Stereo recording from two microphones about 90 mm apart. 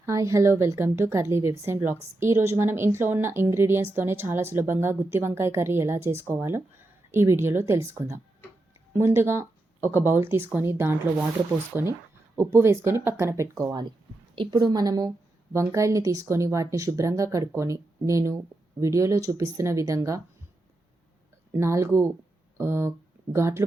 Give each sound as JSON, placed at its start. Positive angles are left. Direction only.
{"t": 0.0, "sound": "a woman's voice", "side_deg": -35}
{"t": 14.3, "sound": "a woman's voice", "side_deg": -65}
{"t": 14.7, "sound": "a woman's voice", "side_deg": -45}
{"t": 15.5, "sound": "speech", "side_deg": -35}
{"t": 21.5, "sound": "a woman's voice", "side_deg": -30}